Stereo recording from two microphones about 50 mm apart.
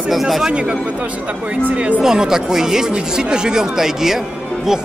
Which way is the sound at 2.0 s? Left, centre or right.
Centre.